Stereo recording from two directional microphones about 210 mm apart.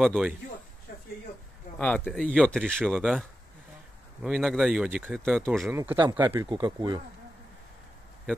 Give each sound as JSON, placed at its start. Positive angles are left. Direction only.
{"t": 0.0, "sound": "speech", "side_deg": -5}
{"t": 1.8, "sound": "speech", "side_deg": 5}
{"t": 5.9, "sound": "speech", "side_deg": -20}
{"t": 6.2, "sound": "speech", "side_deg": -10}
{"t": 6.6, "sound": "speech", "side_deg": -20}